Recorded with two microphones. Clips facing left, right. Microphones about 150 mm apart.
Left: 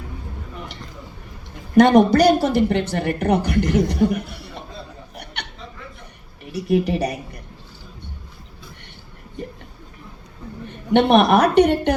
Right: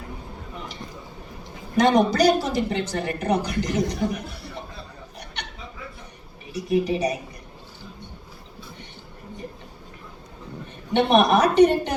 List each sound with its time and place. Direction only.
1.7 s a woman's voice: 60° left (ahead or behind)
5.2 s a sound: 60° left (ahead or behind)
6.4 s a woman's voice: 65° left (ahead or behind)
10.9 s a woman's voice: 65° left (ahead or behind)